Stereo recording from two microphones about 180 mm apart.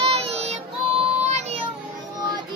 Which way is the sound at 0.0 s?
35° right (ahead or behind).